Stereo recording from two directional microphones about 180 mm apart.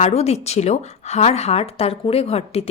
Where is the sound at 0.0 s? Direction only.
35° left (ahead or behind).